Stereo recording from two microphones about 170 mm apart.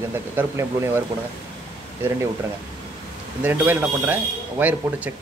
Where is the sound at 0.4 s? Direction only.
15° right (ahead or behind).